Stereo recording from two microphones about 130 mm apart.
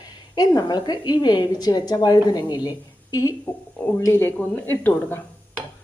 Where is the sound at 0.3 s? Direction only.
30° left (ahead or behind).